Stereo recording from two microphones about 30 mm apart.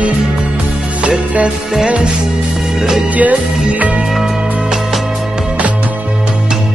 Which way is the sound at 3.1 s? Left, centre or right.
Right.